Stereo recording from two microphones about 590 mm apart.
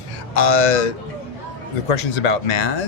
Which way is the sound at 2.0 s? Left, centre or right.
Left.